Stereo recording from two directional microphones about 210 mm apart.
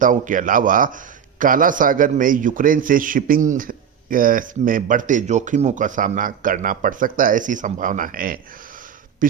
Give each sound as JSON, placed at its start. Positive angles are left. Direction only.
{"t": 0.0, "sound": "a man's voice", "side_deg": -40}